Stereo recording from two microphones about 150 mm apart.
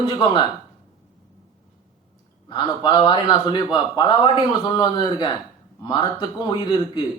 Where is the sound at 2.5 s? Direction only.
30° left (ahead or behind).